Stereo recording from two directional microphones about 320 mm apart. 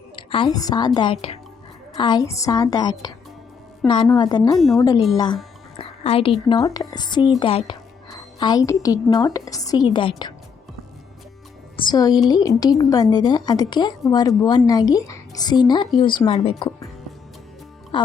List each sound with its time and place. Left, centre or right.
0.2 s a woman's voice: centre
4.5 s speech: centre
5.1 s a woman's voice: centre
11.8 s a woman's voice: centre
17.9 s speech: centre